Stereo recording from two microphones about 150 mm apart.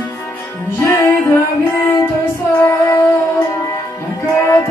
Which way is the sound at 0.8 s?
15° left (ahead or behind).